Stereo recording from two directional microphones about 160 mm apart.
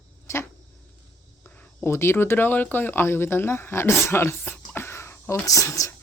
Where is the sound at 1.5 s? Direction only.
10° left (ahead or behind).